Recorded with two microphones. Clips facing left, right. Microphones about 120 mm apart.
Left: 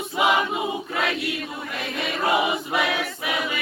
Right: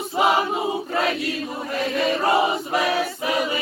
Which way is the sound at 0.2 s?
35° right (ahead or behind).